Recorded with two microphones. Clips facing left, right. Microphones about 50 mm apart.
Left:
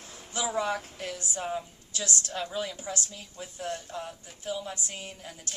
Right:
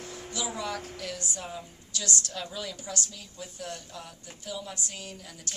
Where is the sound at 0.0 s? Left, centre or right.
Right.